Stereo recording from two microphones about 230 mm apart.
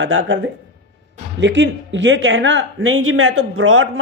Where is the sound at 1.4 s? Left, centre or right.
Right.